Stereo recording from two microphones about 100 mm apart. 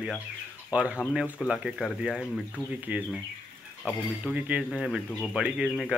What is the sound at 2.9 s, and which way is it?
Speech, 15° right (ahead or behind).